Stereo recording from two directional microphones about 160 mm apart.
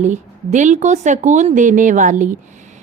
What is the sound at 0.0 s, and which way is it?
A woman's voice, 50° right (ahead or behind).